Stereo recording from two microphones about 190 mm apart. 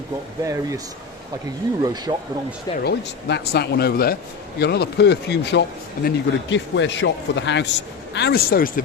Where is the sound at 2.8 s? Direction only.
65° left (ahead or behind).